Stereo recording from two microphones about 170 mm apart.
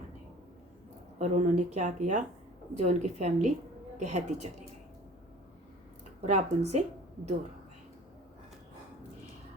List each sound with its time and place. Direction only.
1.2 s speech: 45° right (ahead or behind)
6.2 s speech: 40° right (ahead or behind)